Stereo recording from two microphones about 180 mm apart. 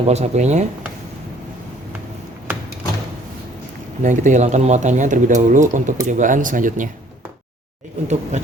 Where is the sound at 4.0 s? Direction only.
45° right (ahead or behind).